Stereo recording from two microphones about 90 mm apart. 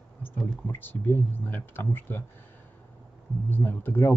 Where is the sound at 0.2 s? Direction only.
25° left (ahead or behind).